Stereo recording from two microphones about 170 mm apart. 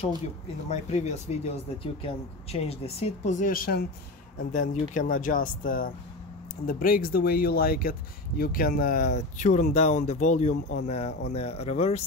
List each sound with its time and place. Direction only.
0.7 s speech: 40° left (ahead or behind)